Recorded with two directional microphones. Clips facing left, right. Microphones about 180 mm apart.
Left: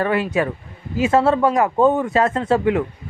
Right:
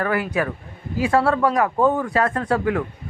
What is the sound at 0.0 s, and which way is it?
Speech, 25° left (ahead or behind).